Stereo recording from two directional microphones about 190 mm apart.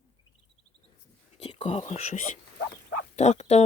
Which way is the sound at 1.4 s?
30° left (ahead or behind).